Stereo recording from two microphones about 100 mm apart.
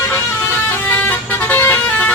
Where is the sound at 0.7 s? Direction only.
20° left (ahead or behind).